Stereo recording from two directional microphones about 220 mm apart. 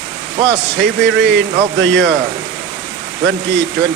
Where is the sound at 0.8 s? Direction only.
55° right (ahead or behind).